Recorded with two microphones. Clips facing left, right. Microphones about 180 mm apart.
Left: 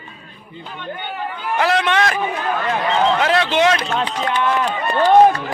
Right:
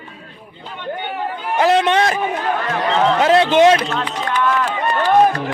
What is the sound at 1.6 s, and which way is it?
Speech, 40° right (ahead or behind).